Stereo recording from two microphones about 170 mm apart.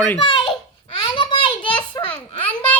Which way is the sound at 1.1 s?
30° left (ahead or behind).